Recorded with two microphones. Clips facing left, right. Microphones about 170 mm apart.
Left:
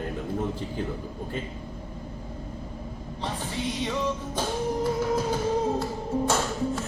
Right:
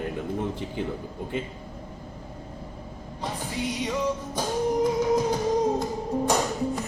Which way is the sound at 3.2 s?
10° right (ahead or behind).